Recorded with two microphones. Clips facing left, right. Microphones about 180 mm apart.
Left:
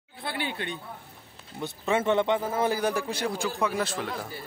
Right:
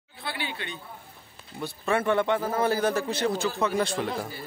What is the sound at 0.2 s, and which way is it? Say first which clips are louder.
Speech: left 2 dB; 50° left (ahead or behind).